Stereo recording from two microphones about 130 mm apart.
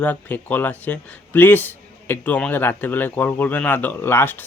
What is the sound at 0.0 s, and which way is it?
Speech, 15° left (ahead or behind).